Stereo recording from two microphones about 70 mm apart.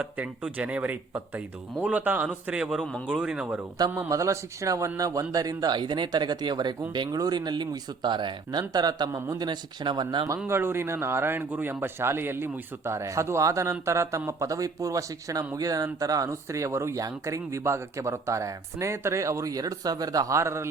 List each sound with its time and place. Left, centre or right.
0.0 s a man's voice: centre
3.8 s a man's voice: right
4.1 s speech: right
6.9 s speech: right
8.7 s speech: right
9.4 s speech: right
10.4 s speech: right
20.3 s speech: right